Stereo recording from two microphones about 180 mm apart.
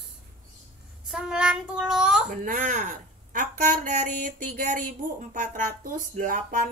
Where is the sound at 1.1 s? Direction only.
5° right (ahead or behind).